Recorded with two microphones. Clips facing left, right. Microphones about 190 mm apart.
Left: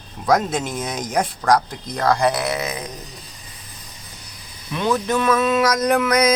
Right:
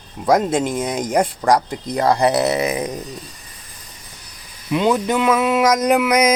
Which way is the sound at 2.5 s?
15° right (ahead or behind).